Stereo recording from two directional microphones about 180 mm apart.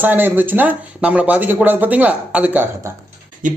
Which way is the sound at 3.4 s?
45° right (ahead or behind).